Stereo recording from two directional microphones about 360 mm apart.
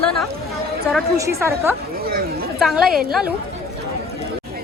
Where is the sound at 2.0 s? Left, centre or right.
Right.